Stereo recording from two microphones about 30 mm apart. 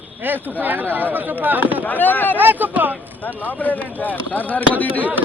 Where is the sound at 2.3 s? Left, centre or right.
Right.